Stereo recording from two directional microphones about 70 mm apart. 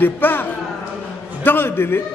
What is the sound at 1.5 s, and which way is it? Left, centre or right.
Speech, left.